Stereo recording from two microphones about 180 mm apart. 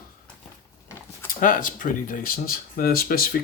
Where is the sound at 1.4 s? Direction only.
50° left (ahead or behind).